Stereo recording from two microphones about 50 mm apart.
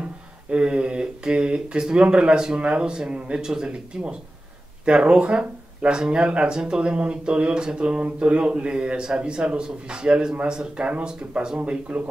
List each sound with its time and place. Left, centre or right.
0.0 s speech: right